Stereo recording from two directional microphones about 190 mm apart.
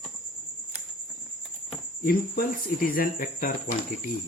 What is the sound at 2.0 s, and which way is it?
Speech, 50° left (ahead or behind).